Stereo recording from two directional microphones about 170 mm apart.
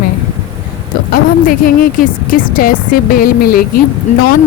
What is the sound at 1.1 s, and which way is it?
A woman's voice, 55° left (ahead or behind).